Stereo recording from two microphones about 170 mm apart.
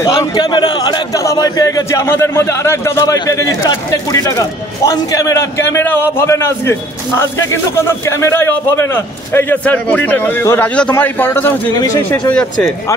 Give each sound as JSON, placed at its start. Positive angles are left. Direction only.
{"t": 0.0, "sound": "a man's voice", "side_deg": 20}